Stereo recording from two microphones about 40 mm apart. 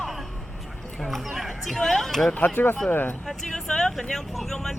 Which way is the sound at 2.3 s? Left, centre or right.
Left.